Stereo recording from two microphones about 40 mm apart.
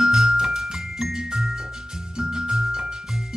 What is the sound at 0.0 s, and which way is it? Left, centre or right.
Music, centre.